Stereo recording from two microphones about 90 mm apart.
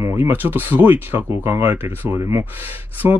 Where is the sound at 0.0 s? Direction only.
30° right (ahead or behind).